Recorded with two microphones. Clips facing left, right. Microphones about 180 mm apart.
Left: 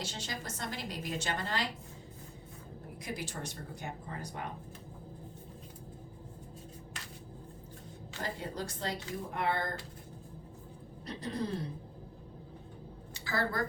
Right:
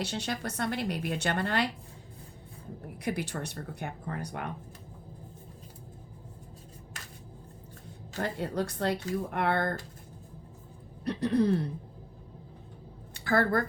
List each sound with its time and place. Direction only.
0.0 s a woman's voice: 65° right (ahead or behind)
3.0 s a woman's voice: 65° right (ahead or behind)
8.2 s a woman's voice: 65° right (ahead or behind)
11.0 s a sound: 65° right (ahead or behind)
13.1 s a woman's voice: 55° right (ahead or behind)